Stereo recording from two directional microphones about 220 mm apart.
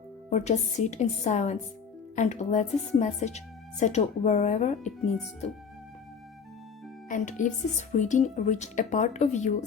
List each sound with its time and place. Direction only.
0.3 s a woman's voice: 30° left (ahead or behind)
7.1 s a woman's voice: 35° left (ahead or behind)